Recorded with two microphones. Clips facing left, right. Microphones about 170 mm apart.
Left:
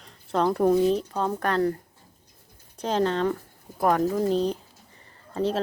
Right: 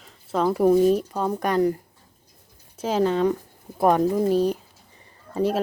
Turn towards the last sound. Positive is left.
turn(degrees=-10)  # may be behind; listen again after turning